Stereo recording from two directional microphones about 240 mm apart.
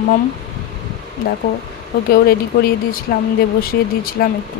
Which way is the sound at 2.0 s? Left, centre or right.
Left.